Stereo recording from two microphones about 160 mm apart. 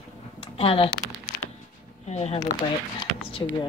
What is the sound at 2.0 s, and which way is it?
Speech, 40° left (ahead or behind).